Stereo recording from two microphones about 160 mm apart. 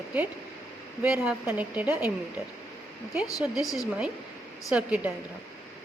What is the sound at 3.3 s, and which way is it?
A woman's voice, centre (ahead or behind).